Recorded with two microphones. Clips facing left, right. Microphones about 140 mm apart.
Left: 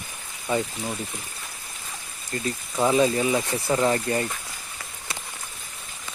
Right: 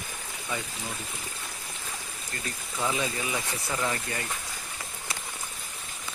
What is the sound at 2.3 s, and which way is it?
Speech, 30° left (ahead or behind).